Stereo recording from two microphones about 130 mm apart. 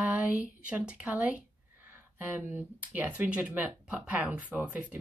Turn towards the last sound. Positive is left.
turn(degrees=-10)  # may be behind; listen again after turning